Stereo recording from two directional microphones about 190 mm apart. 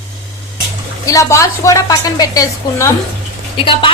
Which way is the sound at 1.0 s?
15° left (ahead or behind).